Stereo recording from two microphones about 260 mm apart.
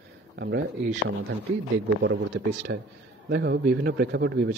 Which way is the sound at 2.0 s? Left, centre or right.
Right.